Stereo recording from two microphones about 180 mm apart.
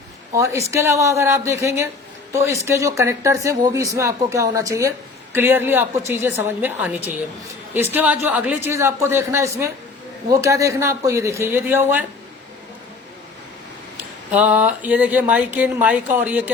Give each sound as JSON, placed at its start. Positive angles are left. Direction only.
{"t": 0.3, "sound": "speech", "side_deg": -15}
{"t": 13.9, "sound": "speech", "side_deg": -10}